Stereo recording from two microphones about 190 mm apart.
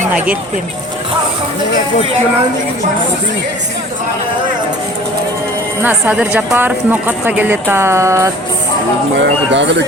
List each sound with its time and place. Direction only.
5.8 s speech: 10° right (ahead or behind)
9.5 s speech: 70° right (ahead or behind)